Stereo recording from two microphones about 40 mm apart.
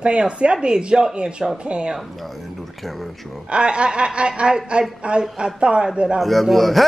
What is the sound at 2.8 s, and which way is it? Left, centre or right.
Speech, centre.